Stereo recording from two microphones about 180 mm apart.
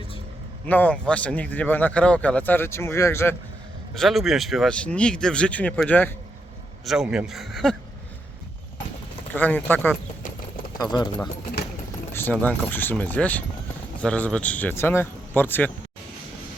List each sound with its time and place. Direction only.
0.7 s speech: 10° left (ahead or behind)
3.9 s speech: centre (ahead or behind)
6.8 s speech: 5° right (ahead or behind)
9.3 s speech: 10° left (ahead or behind)
10.8 s speech: 25° left (ahead or behind)
12.1 s speech: 10° left (ahead or behind)